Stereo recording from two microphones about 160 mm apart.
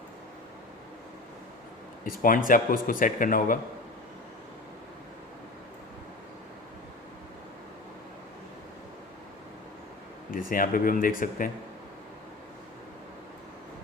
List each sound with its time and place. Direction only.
2.0 s a man's voice: 60° left (ahead or behind)
10.3 s a man's voice: 60° left (ahead or behind)